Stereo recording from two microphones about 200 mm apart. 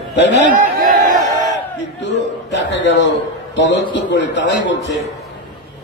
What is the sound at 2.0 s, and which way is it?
A man's voice, 60° left (ahead or behind).